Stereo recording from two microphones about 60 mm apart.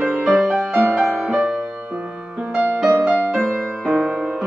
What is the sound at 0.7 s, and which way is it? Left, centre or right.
Music, right.